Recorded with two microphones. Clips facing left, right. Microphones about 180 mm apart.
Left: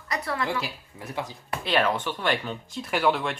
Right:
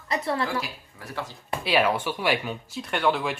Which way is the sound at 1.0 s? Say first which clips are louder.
Left 2 dB; 15° left (ahead or behind).